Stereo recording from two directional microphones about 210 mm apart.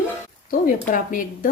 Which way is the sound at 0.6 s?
40° left (ahead or behind).